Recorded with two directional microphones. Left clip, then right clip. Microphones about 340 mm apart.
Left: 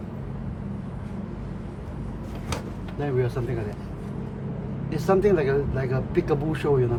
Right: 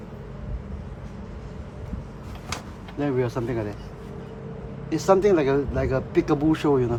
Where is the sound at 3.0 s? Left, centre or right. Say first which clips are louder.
Right 2 dB; right.